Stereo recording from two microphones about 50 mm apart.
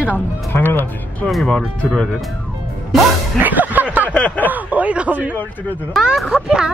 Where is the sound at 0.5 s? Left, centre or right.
Left.